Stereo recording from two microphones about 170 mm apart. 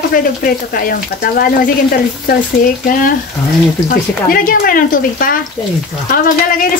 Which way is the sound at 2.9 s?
55° left (ahead or behind).